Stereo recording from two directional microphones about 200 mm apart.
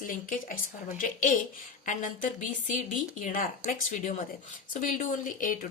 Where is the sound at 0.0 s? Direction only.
45° left (ahead or behind).